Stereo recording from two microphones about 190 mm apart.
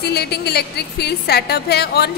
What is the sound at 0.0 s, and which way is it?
A woman's voice, 55° left (ahead or behind).